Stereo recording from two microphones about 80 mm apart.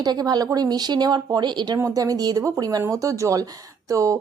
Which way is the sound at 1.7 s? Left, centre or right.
Right.